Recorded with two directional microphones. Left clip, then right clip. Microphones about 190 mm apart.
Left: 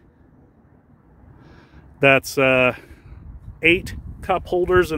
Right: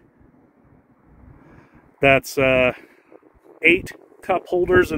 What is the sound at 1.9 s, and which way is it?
Speech, 10° left (ahead or behind).